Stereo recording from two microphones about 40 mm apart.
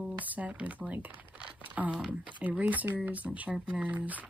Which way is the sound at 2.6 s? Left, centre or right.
Right.